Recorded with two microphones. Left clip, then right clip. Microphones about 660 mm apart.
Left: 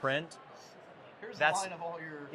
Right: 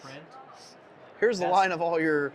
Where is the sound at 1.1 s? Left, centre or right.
Right.